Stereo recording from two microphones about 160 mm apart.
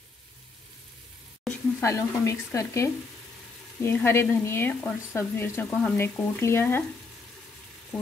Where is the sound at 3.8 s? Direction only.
15° left (ahead or behind).